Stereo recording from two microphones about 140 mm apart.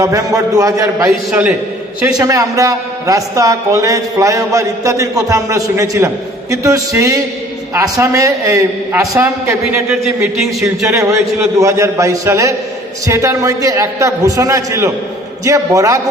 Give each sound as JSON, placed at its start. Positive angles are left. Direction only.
{"t": 0.0, "sound": "a man's voice", "side_deg": -25}
{"t": 1.0, "sound": "a man's voice", "side_deg": -5}
{"t": 2.1, "sound": "a man's voice", "side_deg": -25}
{"t": 10.3, "sound": "speech", "side_deg": 0}
{"t": 10.8, "sound": "a man's voice", "side_deg": -20}